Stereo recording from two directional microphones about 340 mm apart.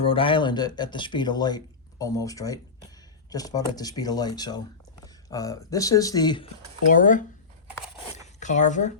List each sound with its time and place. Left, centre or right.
0.0 s speech: centre
8.4 s speech: left